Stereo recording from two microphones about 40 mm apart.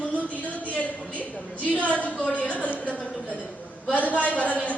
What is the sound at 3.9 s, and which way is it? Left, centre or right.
Speech, left.